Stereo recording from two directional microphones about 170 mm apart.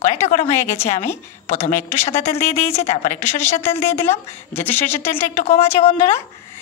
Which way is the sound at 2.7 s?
40° left (ahead or behind).